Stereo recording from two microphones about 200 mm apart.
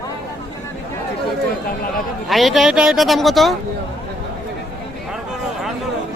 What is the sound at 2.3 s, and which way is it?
Speech, centre (ahead or behind).